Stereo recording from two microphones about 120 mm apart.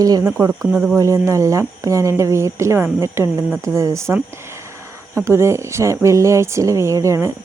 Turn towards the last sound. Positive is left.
turn(degrees=-25)  # may be behind; listen again after turning